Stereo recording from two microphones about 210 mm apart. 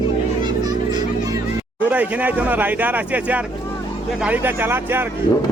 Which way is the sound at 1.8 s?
5° right (ahead or behind).